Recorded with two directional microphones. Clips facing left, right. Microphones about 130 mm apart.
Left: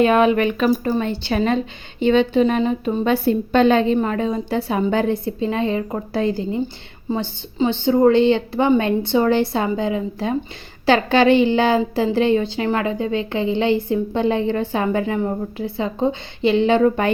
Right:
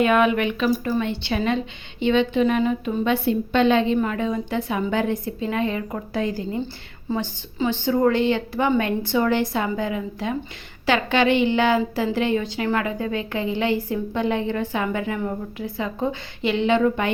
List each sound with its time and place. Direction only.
0.0 s a woman's voice: 30° left (ahead or behind)